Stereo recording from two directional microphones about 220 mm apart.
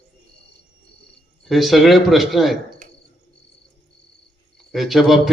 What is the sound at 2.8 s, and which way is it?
Cricket, 35° right (ahead or behind).